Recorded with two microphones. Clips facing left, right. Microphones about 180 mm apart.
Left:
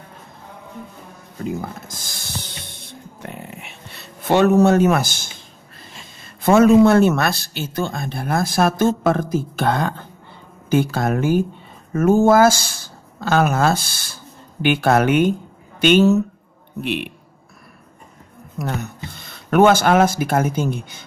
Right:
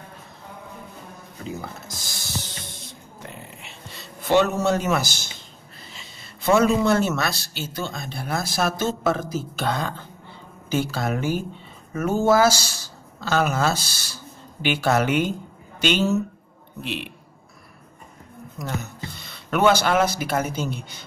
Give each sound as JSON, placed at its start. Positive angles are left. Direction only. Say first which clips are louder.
{"t": 1.4, "sound": "a sound", "louder": "left 7 dB", "side_deg": 50}
{"t": 5.9, "sound": "a man's voice", "louder": "left 4 dB", "side_deg": 50}
{"t": 18.6, "sound": "speech", "louder": "left 5 dB", "side_deg": 60}